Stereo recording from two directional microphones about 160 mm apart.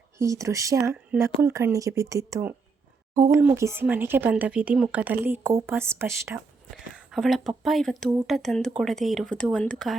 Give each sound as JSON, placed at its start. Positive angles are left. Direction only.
{"t": 0.2, "sound": "speech", "side_deg": -20}
{"t": 6.9, "sound": "speech", "side_deg": 0}